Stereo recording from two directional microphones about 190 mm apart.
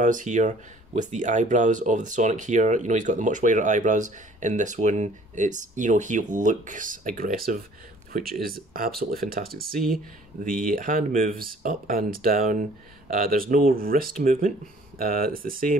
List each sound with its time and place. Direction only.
0.0 s speech: 40° right (ahead or behind)